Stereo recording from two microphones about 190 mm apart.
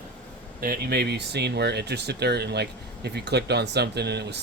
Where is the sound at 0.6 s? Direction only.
50° right (ahead or behind).